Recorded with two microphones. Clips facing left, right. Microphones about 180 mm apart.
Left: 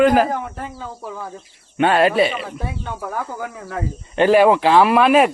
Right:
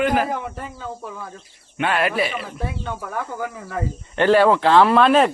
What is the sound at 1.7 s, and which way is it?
Speech, 30° left (ahead or behind).